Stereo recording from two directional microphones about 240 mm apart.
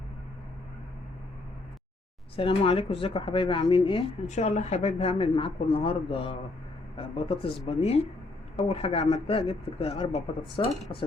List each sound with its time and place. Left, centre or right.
2.3 s speech: left